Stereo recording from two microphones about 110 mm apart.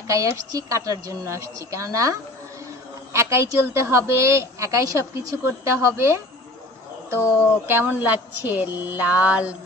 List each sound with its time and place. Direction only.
0.1 s a woman's voice: 30° right (ahead or behind)
7.6 s speech: 20° right (ahead or behind)